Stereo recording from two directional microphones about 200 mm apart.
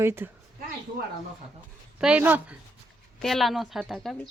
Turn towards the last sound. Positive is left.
turn(degrees=0)  # may be behind; listen again after turning